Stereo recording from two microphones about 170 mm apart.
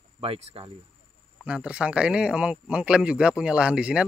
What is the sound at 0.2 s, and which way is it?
Speech, 35° right (ahead or behind).